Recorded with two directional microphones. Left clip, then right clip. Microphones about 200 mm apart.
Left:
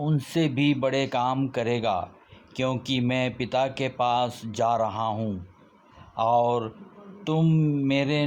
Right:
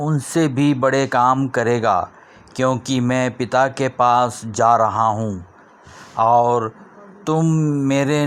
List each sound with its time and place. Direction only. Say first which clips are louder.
0.0 s speech: right 7 dB; 15° right (ahead or behind)